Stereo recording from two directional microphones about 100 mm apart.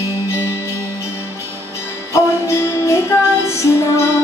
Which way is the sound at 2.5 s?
30° left (ahead or behind).